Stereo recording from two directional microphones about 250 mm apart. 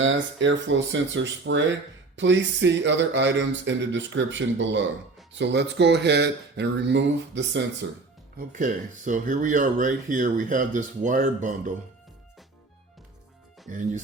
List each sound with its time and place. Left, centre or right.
0.0 s speech: right
8.4 s speech: right
13.7 s speech: right